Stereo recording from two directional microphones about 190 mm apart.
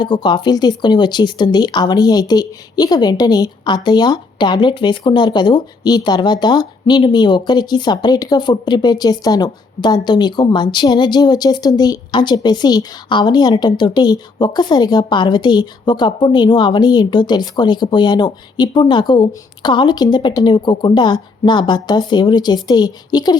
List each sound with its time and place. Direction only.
0.0 s speech: 25° left (ahead or behind)